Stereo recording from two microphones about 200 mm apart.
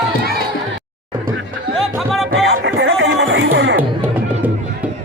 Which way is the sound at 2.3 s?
65° right (ahead or behind).